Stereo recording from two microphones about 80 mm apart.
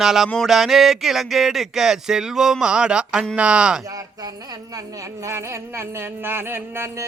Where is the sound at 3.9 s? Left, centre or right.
Right.